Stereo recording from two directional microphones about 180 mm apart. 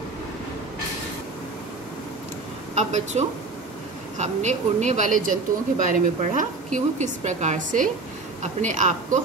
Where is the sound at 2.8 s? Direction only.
40° right (ahead or behind).